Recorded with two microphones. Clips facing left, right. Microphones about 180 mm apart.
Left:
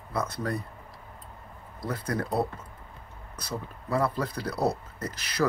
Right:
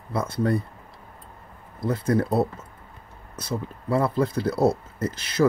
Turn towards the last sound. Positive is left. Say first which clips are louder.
# right 6 dB
turn(degrees=-25)  # may be behind; listen again after turning